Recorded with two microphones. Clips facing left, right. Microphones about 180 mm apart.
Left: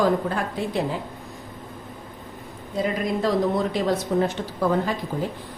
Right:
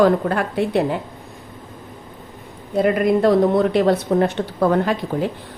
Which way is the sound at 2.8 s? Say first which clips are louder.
Right 8 dB; 60° right (ahead or behind).